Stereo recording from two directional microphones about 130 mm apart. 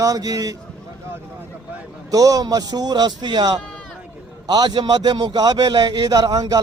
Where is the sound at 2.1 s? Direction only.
30° right (ahead or behind).